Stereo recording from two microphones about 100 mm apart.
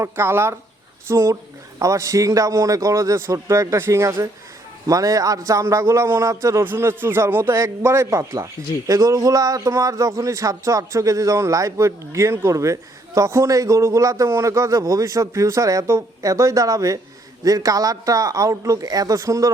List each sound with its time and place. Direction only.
0.0 s a man's voice: 25° right (ahead or behind)